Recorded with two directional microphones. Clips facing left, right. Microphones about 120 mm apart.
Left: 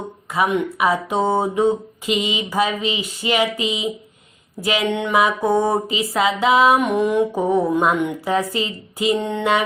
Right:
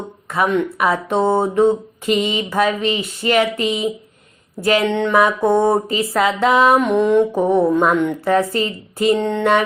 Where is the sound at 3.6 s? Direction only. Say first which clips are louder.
Right 4 dB; 45° right (ahead or behind).